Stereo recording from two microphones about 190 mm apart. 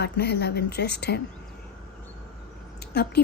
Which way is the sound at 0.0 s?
60° left (ahead or behind).